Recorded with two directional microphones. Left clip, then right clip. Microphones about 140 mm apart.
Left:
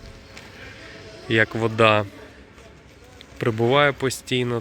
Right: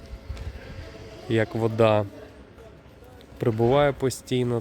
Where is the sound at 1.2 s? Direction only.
5° right (ahead or behind).